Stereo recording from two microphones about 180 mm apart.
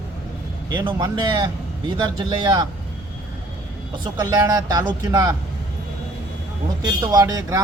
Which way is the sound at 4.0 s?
20° right (ahead or behind).